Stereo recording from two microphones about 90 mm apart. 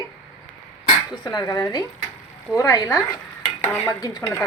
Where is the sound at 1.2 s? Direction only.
50° left (ahead or behind).